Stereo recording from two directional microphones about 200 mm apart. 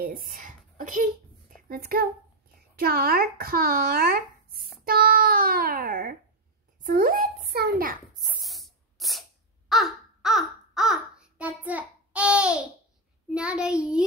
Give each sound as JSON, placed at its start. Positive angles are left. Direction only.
{"t": 0.0, "sound": "a child's voice", "side_deg": -45}
{"t": 8.4, "sound": "spray", "side_deg": 0}
{"t": 9.7, "sound": "babbling", "side_deg": 0}
{"t": 13.3, "sound": "a child's voice", "side_deg": -5}